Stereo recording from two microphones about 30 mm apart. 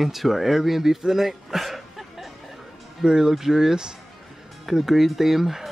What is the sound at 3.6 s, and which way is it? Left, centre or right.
Speech, right.